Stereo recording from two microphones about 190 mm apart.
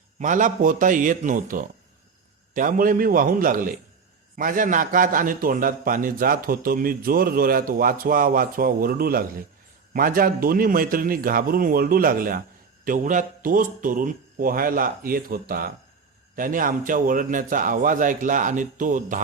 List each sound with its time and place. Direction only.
0.2 s a man's voice: 40° right (ahead or behind)